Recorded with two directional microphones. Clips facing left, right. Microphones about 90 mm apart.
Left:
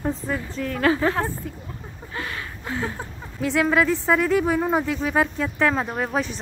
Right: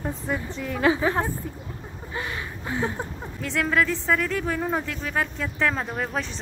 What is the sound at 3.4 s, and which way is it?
Speech, 5° left (ahead or behind).